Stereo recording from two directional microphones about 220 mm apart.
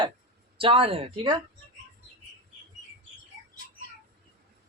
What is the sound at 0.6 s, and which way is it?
Speech, 25° right (ahead or behind).